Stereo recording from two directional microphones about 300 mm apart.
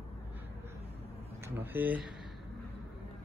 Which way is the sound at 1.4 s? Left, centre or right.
Centre.